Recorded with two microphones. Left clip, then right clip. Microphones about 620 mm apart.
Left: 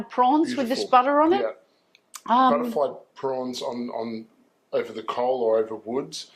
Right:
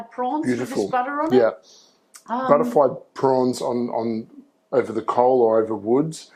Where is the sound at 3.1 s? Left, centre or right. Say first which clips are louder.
Right 9 dB; right.